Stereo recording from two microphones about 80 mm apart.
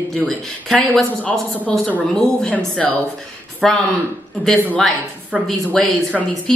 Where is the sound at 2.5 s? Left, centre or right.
Centre.